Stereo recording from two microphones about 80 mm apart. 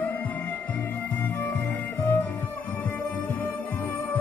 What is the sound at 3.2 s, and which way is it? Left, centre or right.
Music, left.